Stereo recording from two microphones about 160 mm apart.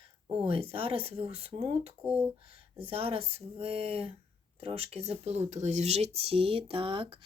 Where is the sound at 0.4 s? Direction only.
40° right (ahead or behind).